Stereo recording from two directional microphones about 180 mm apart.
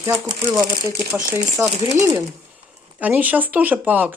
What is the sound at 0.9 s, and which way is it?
Speech, 15° right (ahead or behind).